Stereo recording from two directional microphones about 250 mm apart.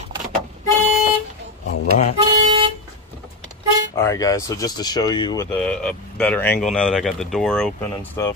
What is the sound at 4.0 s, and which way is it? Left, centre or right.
Speech, centre.